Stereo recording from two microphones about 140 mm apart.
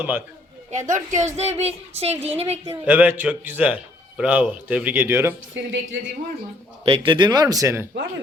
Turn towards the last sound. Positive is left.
turn(degrees=-20)  # may be behind; listen again after turning